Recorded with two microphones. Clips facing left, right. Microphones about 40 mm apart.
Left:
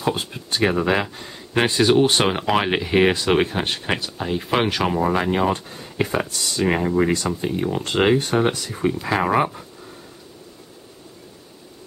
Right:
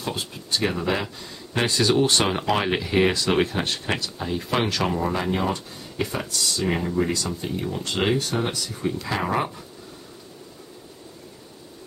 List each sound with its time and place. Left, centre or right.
0.0 s speech: left
9.1 s speech: left